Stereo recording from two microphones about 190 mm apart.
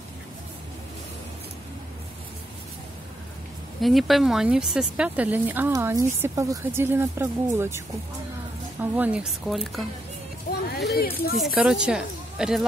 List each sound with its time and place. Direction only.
3.8 s speech: centre (ahead or behind)
8.9 s a woman's voice: 5° right (ahead or behind)
10.8 s speech: 55° left (ahead or behind)
11.3 s a woman's voice: 5° right (ahead or behind)